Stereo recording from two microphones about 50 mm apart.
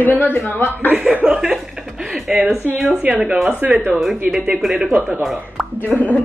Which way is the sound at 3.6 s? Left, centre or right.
Right.